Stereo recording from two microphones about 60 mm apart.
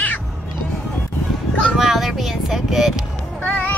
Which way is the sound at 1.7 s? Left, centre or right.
Centre.